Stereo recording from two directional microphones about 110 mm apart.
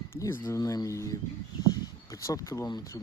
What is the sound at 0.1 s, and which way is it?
Speech, 25° left (ahead or behind).